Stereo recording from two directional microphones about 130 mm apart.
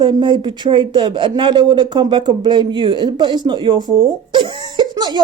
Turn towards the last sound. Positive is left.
turn(degrees=-35)  # may be behind; listen again after turning